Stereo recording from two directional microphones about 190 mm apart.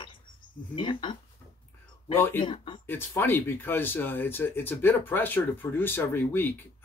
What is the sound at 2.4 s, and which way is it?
Speech, 25° left (ahead or behind).